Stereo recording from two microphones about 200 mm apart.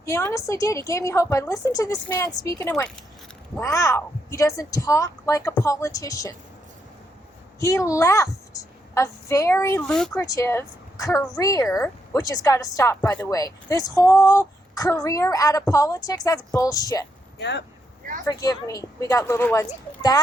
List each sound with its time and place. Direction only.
0.0 s a woman's voice: 15° left (ahead or behind)
7.6 s a woman's voice: 15° left (ahead or behind)
9.9 s speech: centre (ahead or behind)
10.2 s a woman's voice: 15° left (ahead or behind)
17.3 s speech: 60° left (ahead or behind)
18.3 s a woman's voice: 15° left (ahead or behind)